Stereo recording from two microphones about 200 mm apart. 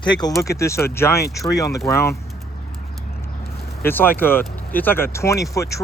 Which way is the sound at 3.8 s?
10° left (ahead or behind).